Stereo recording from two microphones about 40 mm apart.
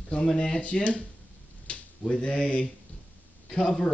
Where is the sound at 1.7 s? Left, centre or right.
Left.